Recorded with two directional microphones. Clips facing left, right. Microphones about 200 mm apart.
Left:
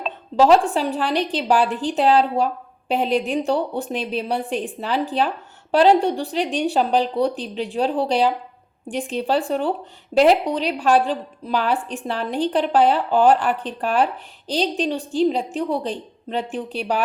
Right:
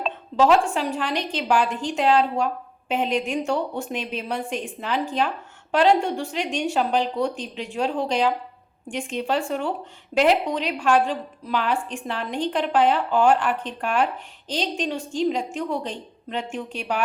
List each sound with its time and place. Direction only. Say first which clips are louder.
0.3 s a woman's voice: left 3 dB; 35° left (ahead or behind)